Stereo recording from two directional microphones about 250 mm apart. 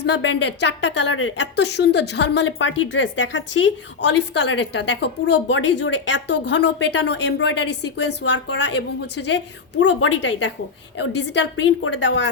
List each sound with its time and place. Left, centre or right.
0.0 s a woman's voice: left